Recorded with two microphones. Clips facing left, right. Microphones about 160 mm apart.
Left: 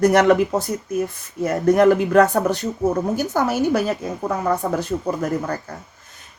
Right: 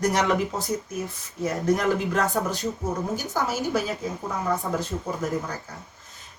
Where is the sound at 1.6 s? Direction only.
60° left (ahead or behind).